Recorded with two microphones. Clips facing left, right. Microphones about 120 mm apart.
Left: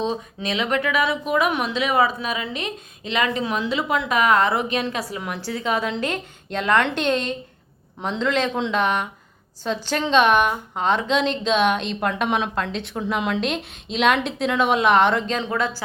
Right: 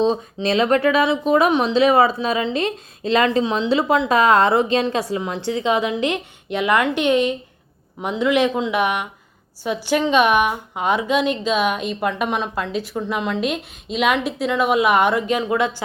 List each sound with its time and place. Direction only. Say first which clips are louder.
0.0 s a woman's voice: right 6 dB; 35° right (ahead or behind)